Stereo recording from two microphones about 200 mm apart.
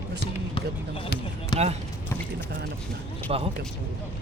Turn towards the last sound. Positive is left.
turn(degrees=-30)  # may be behind; listen again after turning